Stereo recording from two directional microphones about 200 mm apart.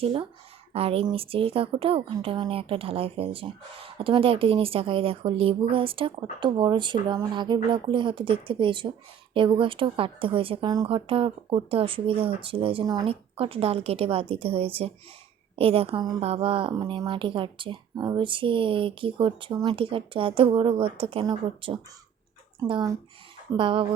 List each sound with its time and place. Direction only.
0.0 s speech: 25° right (ahead or behind)